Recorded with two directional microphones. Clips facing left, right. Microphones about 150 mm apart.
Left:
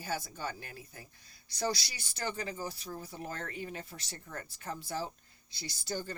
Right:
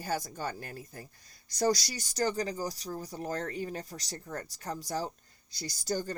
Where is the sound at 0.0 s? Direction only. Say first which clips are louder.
Right 3 dB; 40° right (ahead or behind).